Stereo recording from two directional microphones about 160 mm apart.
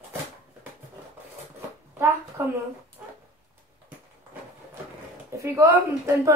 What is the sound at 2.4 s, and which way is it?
Speech, 15° right (ahead or behind).